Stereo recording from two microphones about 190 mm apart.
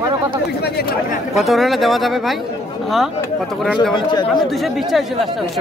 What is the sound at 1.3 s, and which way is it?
Speech, centre (ahead or behind).